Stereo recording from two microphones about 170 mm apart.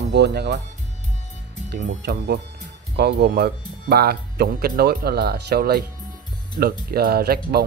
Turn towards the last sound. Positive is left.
turn(degrees=-65)  # may be behind; listen again after turning